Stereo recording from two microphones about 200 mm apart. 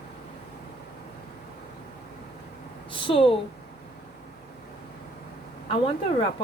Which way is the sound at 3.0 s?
25° left (ahead or behind).